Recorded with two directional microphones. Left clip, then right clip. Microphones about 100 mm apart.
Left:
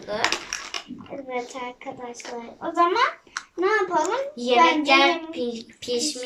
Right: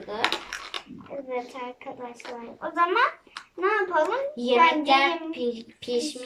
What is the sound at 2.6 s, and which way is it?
Speech, 25° left (ahead or behind).